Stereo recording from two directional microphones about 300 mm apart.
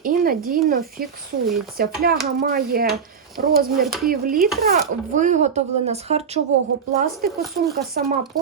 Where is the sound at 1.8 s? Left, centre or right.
Right.